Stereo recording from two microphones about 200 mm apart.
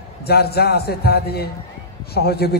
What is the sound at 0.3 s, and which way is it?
A man's voice, 50° left (ahead or behind).